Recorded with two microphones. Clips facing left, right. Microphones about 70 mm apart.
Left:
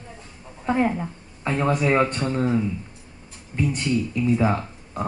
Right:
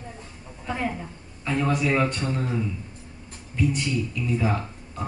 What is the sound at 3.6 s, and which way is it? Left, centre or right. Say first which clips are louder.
Speech: even; left.